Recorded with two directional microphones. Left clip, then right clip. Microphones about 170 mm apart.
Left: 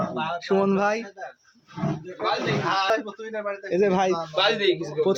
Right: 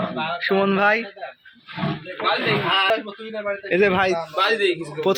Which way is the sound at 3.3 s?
5° left (ahead or behind).